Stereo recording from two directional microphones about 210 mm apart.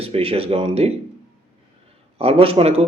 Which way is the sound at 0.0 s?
30° right (ahead or behind).